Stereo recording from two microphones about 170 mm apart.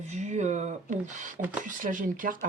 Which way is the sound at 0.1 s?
45° right (ahead or behind).